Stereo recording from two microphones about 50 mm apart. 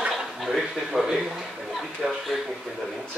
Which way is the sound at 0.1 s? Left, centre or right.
Centre.